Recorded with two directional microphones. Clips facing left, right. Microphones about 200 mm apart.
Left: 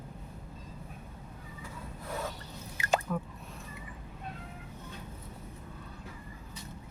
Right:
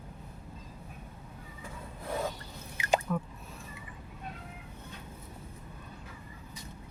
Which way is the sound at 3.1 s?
5° left (ahead or behind).